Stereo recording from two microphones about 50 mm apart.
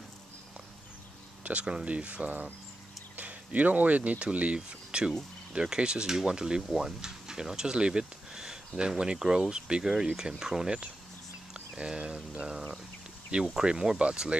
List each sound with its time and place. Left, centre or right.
1.4 s speech: right
13.6 s speech: centre